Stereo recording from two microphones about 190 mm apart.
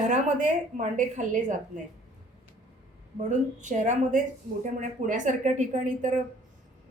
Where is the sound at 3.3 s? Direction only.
40° right (ahead or behind).